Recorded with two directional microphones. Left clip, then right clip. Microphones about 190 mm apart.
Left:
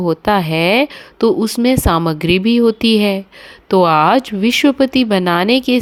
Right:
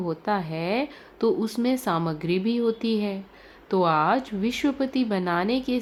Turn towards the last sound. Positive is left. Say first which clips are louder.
# left 12 dB
turn(degrees=45)  # may be behind; listen again after turning